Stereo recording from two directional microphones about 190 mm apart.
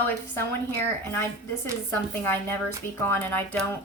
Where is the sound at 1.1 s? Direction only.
10° left (ahead or behind).